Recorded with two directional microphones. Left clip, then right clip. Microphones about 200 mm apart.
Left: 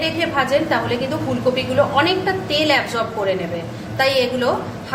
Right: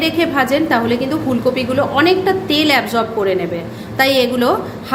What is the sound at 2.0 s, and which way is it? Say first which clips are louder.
Speech: right 4 dB; 40° right (ahead or behind).